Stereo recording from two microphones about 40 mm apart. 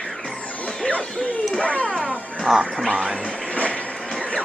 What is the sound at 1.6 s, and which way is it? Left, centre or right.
Dog, left.